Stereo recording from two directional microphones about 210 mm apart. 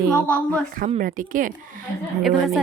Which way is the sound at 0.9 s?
40° right (ahead or behind).